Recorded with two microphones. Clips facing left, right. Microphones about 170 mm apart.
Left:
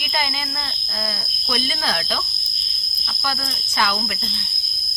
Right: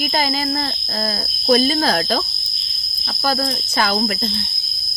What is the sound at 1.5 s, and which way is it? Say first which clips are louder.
Speech: right 11 dB; 45° right (ahead or behind).